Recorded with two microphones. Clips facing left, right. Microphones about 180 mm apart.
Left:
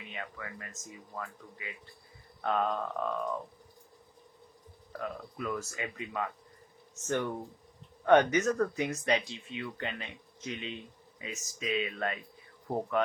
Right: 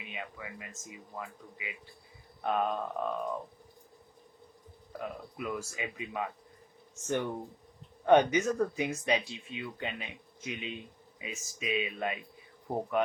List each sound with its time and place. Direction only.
0.0 s speech: 15° right (ahead or behind)
4.9 s speech: 15° right (ahead or behind)